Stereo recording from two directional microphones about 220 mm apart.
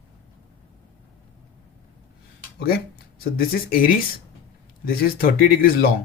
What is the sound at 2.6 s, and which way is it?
Speech, 45° left (ahead or behind).